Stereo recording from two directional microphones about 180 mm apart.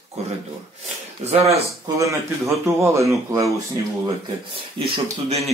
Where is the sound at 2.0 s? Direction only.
15° right (ahead or behind).